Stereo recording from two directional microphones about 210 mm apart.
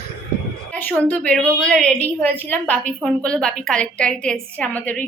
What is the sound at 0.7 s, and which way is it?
A woman's voice, 5° left (ahead or behind).